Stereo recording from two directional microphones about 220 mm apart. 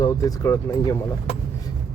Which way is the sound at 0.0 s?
15° left (ahead or behind).